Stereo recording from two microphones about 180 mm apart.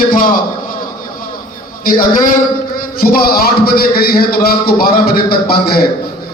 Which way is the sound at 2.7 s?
55° left (ahead or behind).